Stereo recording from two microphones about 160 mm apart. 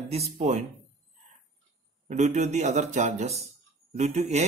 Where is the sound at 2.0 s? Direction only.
45° right (ahead or behind).